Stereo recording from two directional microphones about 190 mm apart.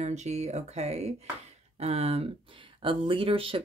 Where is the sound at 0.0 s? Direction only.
35° right (ahead or behind).